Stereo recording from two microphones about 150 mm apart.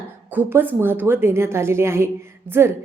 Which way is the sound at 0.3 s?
10° right (ahead or behind).